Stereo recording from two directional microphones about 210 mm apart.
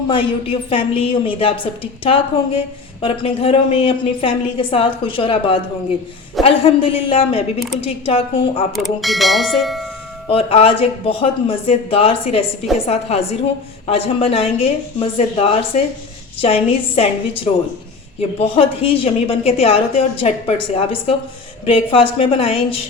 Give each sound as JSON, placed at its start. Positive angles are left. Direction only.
{"t": 0.1, "sound": "a woman's voice", "side_deg": 25}
{"t": 8.7, "sound": "speech", "side_deg": 0}
{"t": 10.2, "sound": "a woman's voice", "side_deg": 25}